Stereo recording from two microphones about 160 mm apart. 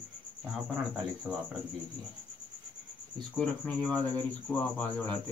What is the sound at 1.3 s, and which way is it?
Speech, 10° right (ahead or behind).